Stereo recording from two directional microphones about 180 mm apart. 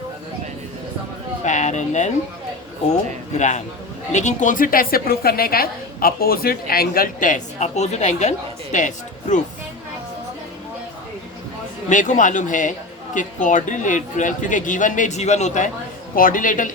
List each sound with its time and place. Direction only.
1.5 s speech: 40° left (ahead or behind)
3.3 s a man's voice: 40° left (ahead or behind)
11.9 s a woman's voice: 45° left (ahead or behind)